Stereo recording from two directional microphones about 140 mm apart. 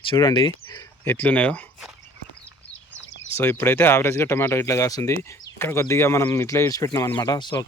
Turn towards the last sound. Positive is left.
turn(degrees=30)  # may be behind; listen again after turning